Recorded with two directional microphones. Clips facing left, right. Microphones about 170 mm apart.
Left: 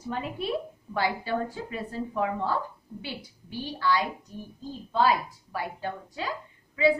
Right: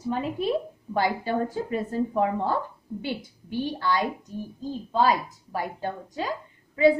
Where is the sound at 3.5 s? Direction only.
50° right (ahead or behind).